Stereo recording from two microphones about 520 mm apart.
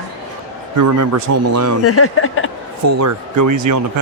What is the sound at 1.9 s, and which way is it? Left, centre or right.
Speech, left.